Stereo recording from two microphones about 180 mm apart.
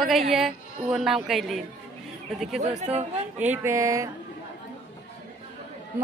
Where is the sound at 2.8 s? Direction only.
35° right (ahead or behind).